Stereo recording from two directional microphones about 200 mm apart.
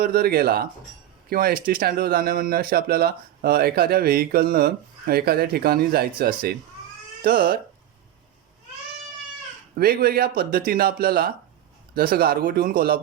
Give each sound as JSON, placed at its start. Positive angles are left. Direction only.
{"t": 0.0, "sound": "speech", "side_deg": -50}
{"t": 9.7, "sound": "speech", "side_deg": -50}